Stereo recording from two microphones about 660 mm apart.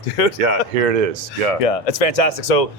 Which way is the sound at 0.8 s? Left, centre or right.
Right.